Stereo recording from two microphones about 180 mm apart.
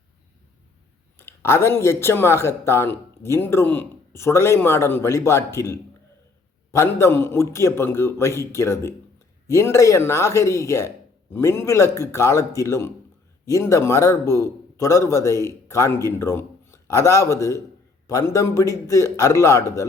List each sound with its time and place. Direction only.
1.2 s a man's voice: 15° left (ahead or behind)